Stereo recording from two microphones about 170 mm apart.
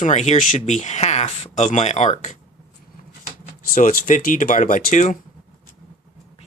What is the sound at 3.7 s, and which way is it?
Speech, 50° left (ahead or behind).